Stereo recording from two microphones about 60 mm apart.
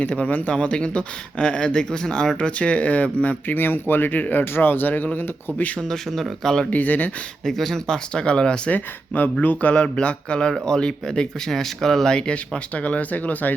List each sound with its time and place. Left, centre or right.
0.0 s speech: left
2.5 s speech: left
5.9 s speech: centre
6.7 s speech: left
7.4 s speech: centre
8.7 s speech: left